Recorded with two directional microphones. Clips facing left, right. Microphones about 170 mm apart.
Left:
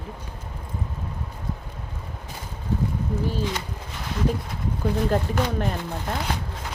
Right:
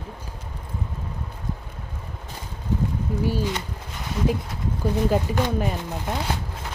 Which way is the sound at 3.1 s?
10° right (ahead or behind).